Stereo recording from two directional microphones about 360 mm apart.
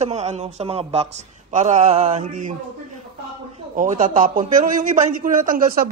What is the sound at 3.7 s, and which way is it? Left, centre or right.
A man's voice, right.